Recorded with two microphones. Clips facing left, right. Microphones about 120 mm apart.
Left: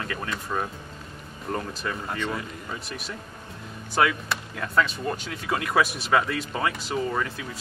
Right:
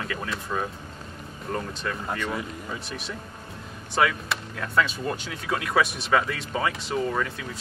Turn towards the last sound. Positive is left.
turn(degrees=0)  # may be behind; listen again after turning